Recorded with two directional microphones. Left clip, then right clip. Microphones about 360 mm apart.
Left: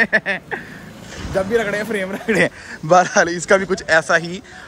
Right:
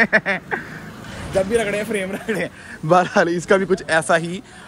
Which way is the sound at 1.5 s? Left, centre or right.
Left.